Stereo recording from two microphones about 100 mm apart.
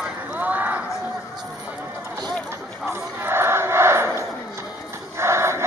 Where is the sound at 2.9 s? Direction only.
25° right (ahead or behind).